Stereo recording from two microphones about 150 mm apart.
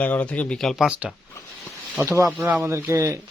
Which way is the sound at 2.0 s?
20° right (ahead or behind).